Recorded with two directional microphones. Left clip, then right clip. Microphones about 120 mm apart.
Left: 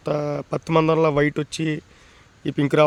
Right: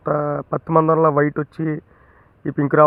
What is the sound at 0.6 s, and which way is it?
Speech, 45° left (ahead or behind).